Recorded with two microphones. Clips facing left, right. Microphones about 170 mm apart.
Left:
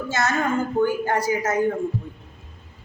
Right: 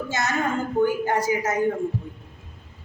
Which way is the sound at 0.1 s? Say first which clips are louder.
Left 3 dB; 15° right (ahead or behind).